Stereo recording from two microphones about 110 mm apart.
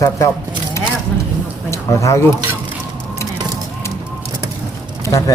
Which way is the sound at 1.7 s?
30° left (ahead or behind).